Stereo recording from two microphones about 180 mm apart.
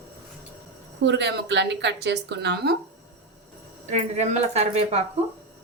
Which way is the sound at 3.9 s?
40° right (ahead or behind).